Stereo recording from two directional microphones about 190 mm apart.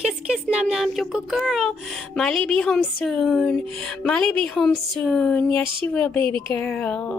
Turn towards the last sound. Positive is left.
turn(degrees=5)  # may be behind; listen again after turning